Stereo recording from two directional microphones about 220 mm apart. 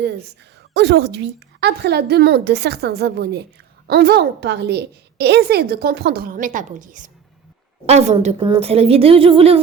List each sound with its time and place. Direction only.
0.7 s a woman's voice: 50° right (ahead or behind); by 9.6 s 25° right (ahead or behind)